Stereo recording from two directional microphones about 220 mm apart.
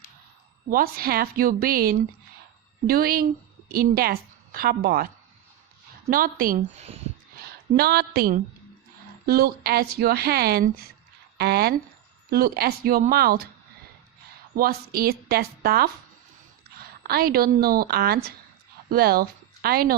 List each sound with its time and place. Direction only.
0.7 s a woman's voice: 40° right (ahead or behind)
6.1 s a woman's voice: 40° right (ahead or behind)
7.8 s a woman's voice: 45° right (ahead or behind)
14.5 s a woman's voice: 45° right (ahead or behind)